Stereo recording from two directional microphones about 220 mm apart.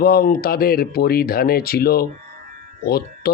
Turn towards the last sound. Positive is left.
turn(degrees=45)  # may be behind; listen again after turning